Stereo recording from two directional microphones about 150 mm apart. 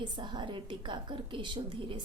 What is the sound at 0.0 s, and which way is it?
A woman's voice, 30° right (ahead or behind).